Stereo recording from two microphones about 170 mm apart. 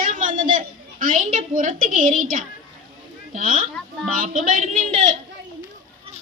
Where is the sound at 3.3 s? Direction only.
50° right (ahead or behind).